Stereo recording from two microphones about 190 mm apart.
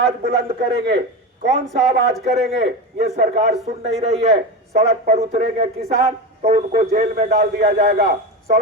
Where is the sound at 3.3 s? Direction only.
40° right (ahead or behind).